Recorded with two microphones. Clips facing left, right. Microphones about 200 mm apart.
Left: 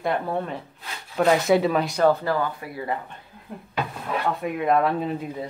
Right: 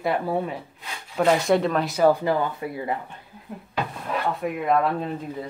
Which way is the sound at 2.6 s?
25° right (ahead or behind).